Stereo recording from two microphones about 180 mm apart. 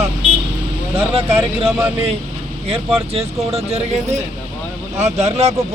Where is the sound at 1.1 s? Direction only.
30° right (ahead or behind).